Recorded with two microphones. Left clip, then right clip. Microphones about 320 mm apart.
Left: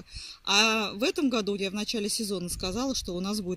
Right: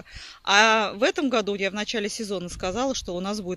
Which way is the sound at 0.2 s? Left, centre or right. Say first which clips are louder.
Right 5 dB; centre.